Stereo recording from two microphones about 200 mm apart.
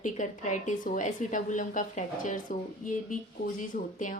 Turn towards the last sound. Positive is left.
turn(degrees=40)  # may be behind; listen again after turning